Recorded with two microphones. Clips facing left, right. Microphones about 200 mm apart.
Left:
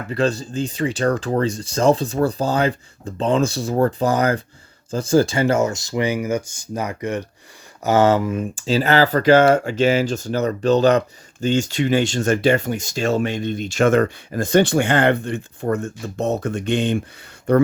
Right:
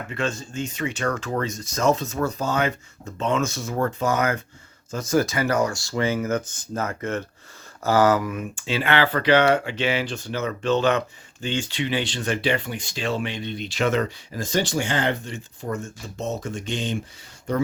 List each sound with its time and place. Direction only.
0.1 s speech: 35° left (ahead or behind); by 7.3 s 15° left (ahead or behind)
7.9 s speech: 25° left (ahead or behind); by 17.6 s 60° left (ahead or behind)